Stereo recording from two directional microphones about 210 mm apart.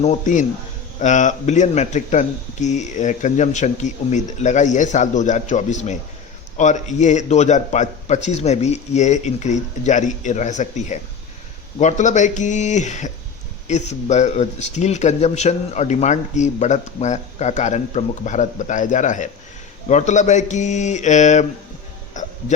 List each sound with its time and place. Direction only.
0.0 s a man's voice: 35° left (ahead or behind)
22.1 s hiccup: 35° left (ahead or behind)